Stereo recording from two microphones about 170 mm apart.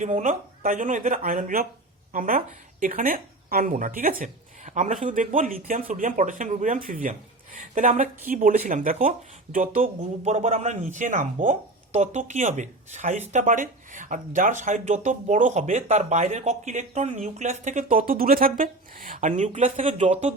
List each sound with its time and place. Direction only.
0.0 s speech: 50° right (ahead or behind)